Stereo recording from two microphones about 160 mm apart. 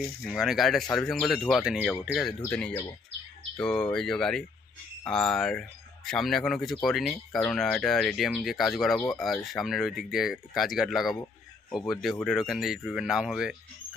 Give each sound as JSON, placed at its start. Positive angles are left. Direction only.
{"t": 0.3, "sound": "speech", "side_deg": 0}